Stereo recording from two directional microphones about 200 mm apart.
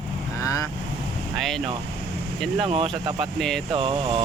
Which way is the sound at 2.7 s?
30° right (ahead or behind).